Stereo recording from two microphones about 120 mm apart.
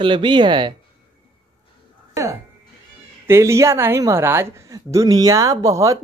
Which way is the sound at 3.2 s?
20° right (ahead or behind).